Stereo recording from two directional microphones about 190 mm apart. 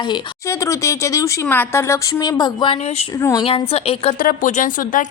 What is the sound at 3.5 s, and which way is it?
Speech, 30° left (ahead or behind).